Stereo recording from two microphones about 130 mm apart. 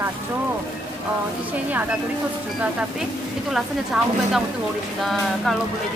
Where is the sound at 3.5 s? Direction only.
Centre (ahead or behind).